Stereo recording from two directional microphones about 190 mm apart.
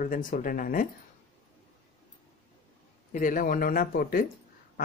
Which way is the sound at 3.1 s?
45° left (ahead or behind).